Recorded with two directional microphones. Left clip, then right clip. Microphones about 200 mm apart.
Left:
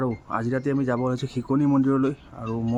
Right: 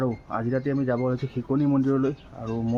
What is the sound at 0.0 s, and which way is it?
Speech, 15° left (ahead or behind).